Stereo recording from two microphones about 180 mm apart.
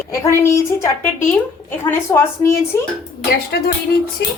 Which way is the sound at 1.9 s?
15° left (ahead or behind).